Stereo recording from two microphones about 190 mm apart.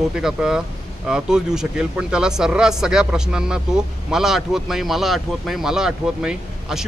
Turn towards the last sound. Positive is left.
turn(degrees=-5)  # may be behind; listen again after turning